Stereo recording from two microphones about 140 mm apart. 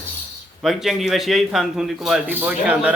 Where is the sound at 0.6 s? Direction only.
5° right (ahead or behind).